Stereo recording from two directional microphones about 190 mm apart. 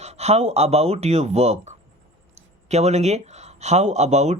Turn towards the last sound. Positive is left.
turn(degrees=-35)  # may be behind; listen again after turning